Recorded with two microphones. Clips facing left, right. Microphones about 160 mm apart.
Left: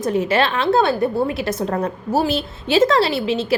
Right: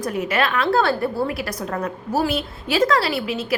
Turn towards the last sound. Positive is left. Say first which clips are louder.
# left 4 dB
turn(degrees=25)  # may be behind; listen again after turning